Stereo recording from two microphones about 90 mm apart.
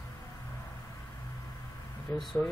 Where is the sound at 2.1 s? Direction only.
30° left (ahead or behind).